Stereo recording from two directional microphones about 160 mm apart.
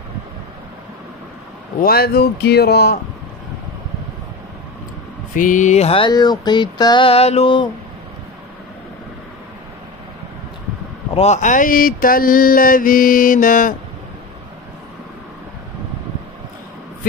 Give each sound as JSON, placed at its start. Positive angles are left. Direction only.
{"t": 1.8, "sound": "a man's voice", "side_deg": 70}
{"t": 5.3, "sound": "music", "side_deg": 55}
{"t": 11.1, "sound": "mantra", "side_deg": 45}